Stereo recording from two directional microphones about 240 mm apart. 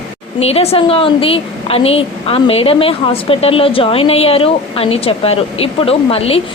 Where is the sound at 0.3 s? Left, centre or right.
Left.